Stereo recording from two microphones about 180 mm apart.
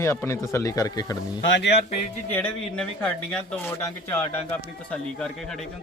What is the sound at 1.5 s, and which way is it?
Speech, 75° left (ahead or behind).